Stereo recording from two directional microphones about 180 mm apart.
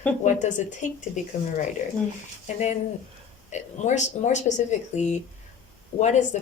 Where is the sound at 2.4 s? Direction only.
40° left (ahead or behind).